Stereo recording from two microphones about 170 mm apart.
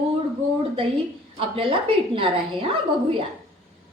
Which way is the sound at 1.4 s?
30° right (ahead or behind).